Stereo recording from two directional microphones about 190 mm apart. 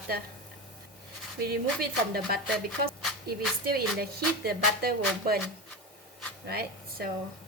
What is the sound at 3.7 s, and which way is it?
Music, 55° right (ahead or behind).